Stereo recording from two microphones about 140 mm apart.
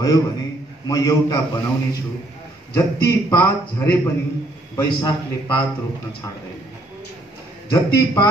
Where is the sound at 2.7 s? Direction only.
20° left (ahead or behind).